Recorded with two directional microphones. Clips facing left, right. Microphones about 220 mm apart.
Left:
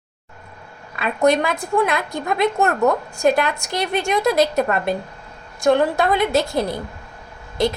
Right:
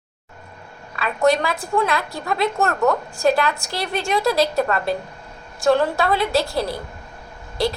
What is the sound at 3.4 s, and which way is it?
A woman's voice, 20° left (ahead or behind).